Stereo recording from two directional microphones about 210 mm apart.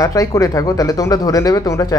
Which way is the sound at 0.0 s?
15° left (ahead or behind).